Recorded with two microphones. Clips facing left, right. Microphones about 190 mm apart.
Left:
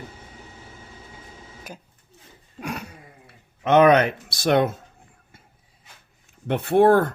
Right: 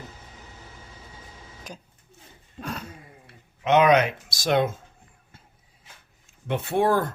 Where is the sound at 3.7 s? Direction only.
55° left (ahead or behind).